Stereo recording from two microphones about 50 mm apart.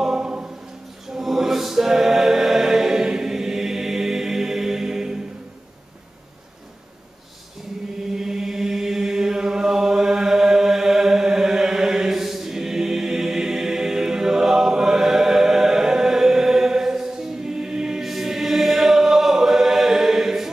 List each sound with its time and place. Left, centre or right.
0.0 s choir: centre
1.0 s choir: centre
8.1 s chant: centre